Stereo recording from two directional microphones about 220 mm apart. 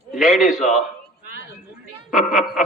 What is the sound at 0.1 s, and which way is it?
Speech, centre (ahead or behind).